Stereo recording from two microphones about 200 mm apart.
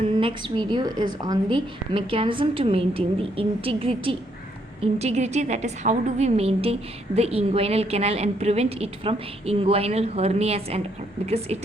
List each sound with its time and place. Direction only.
0.0 s a woman's voice: 25° right (ahead or behind)